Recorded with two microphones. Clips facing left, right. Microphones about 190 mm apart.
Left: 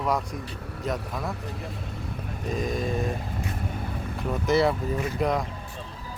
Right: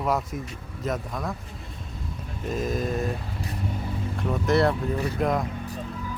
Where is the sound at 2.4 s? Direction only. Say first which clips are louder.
Right 1 dB; centre (ahead or behind).